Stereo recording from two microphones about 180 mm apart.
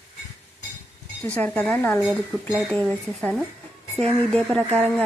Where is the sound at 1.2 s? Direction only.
10° left (ahead or behind).